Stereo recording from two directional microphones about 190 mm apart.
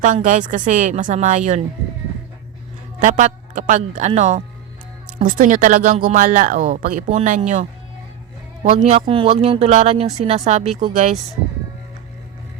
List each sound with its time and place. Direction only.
0.0 s a woman's voice: 40° right (ahead or behind)
3.0 s a woman's voice: 40° right (ahead or behind)